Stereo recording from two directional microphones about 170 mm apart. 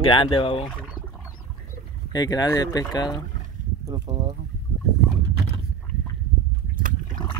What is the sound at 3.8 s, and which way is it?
Speech, 25° right (ahead or behind).